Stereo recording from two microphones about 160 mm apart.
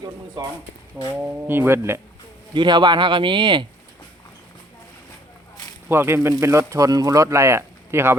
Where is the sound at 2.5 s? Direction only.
30° right (ahead or behind).